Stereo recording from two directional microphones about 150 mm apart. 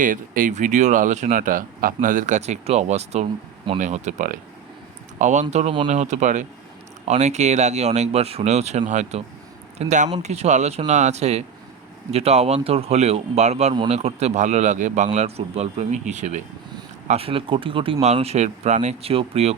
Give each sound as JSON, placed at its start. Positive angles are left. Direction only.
{"t": 0.0, "sound": "speech", "side_deg": -60}
{"t": 17.1, "sound": "speech", "side_deg": -40}